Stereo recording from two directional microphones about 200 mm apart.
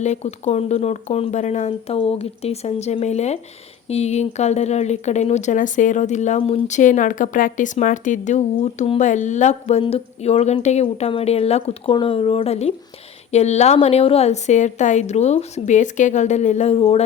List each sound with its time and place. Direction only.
0.0 s speech: 35° left (ahead or behind)